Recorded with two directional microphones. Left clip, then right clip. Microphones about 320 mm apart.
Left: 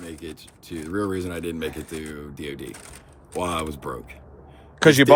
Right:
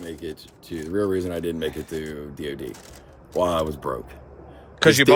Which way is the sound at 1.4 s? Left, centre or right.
Left.